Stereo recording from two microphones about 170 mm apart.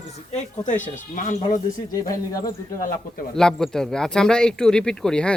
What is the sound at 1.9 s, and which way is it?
Speech, 20° left (ahead or behind).